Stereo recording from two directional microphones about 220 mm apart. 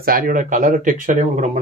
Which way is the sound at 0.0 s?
40° right (ahead or behind).